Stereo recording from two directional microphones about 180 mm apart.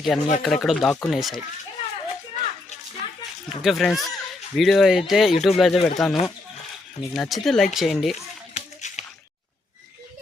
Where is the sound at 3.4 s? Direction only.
Centre (ahead or behind).